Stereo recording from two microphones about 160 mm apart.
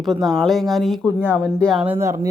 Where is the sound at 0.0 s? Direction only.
Centre (ahead or behind).